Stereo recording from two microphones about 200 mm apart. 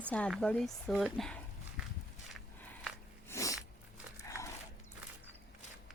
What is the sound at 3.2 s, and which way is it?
Sneeze, 15° left (ahead or behind).